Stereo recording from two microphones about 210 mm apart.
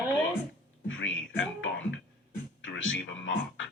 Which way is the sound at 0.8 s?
65° left (ahead or behind).